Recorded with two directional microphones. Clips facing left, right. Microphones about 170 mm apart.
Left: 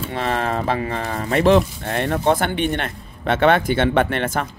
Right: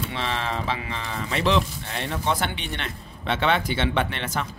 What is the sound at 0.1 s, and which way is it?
Speech, 50° left (ahead or behind).